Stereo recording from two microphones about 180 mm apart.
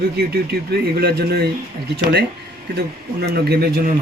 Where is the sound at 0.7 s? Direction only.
60° right (ahead or behind).